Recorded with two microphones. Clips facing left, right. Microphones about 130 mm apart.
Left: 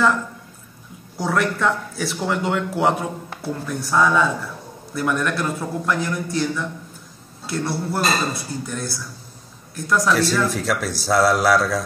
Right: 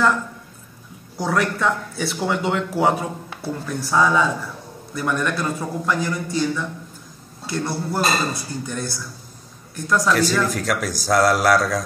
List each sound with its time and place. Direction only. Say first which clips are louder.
1.1 s speech: even; centre (ahead or behind)